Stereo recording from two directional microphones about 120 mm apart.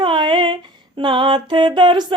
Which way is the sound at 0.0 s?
45° right (ahead or behind).